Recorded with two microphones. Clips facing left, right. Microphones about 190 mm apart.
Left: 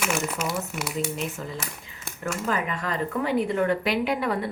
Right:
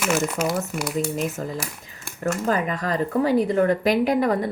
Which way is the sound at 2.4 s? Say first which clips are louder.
Right 3 dB; 40° right (ahead or behind).